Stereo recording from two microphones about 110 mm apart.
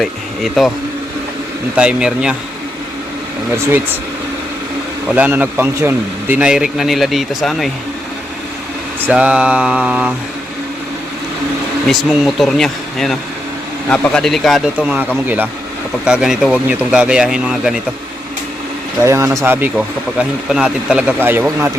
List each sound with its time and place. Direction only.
0.0 s speech: centre (ahead or behind)
1.7 s speech: 10° right (ahead or behind)
5.1 s speech: 15° right (ahead or behind)
6.4 s speech: 5° right (ahead or behind)
9.0 s speech: 15° right (ahead or behind)
11.9 s speech: centre (ahead or behind)
16.0 s speech: 5° right (ahead or behind)
19.0 s speech: 25° right (ahead or behind)
20.1 s speech: 10° right (ahead or behind)